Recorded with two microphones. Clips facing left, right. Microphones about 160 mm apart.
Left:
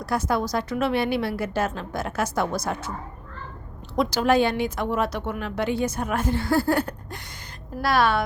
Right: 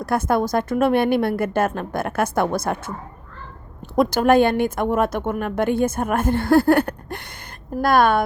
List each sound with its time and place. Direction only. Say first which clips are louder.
0.0 s speech: right 5 dB; 55° right (ahead or behind)
3.9 s speech: right 5 dB; 50° right (ahead or behind)